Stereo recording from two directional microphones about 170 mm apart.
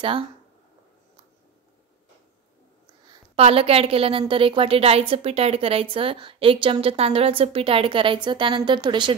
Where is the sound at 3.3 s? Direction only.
35° right (ahead or behind).